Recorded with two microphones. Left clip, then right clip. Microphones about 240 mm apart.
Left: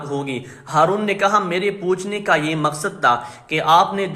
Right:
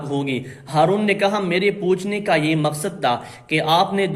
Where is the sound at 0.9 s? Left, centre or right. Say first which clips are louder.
Left 2 dB; centre.